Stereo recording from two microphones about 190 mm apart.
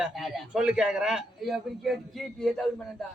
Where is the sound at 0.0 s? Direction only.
Centre (ahead or behind).